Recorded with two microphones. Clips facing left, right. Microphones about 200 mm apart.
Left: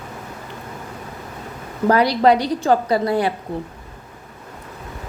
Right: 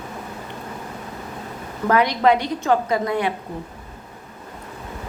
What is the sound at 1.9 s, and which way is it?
A woman's voice, 35° left (ahead or behind).